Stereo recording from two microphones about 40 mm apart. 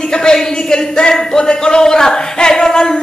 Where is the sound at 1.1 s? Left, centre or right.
Centre.